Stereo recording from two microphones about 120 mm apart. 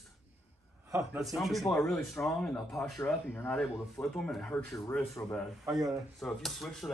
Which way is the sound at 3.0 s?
15° left (ahead or behind).